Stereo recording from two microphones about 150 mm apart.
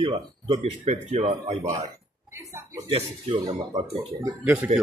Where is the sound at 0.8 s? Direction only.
50° right (ahead or behind).